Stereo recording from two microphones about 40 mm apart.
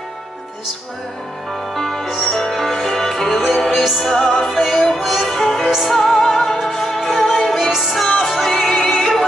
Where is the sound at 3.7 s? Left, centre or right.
Centre.